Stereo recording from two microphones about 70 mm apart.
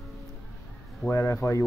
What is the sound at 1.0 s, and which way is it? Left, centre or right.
Speech, left.